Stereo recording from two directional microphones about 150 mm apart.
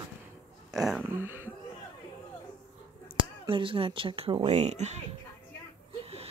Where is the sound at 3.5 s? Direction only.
35° right (ahead or behind).